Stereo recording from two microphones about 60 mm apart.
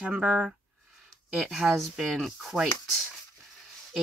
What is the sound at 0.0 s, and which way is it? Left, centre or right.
Speech, right.